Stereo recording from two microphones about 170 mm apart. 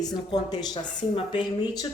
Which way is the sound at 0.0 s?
25° left (ahead or behind).